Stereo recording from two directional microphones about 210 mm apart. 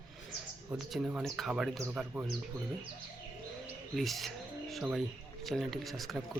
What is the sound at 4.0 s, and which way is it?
Speech, centre (ahead or behind).